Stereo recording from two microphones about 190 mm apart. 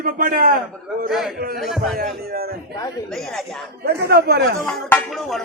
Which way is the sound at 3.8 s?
55° right (ahead or behind).